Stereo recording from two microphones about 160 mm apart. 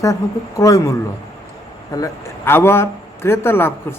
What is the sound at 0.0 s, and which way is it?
Speech, 20° left (ahead or behind).